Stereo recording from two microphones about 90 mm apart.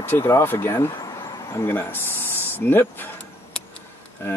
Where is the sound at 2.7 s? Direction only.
25° left (ahead or behind).